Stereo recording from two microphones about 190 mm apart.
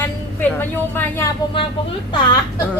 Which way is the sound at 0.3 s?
10° left (ahead or behind).